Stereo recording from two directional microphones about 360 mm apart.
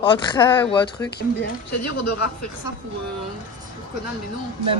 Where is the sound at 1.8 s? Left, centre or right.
Left.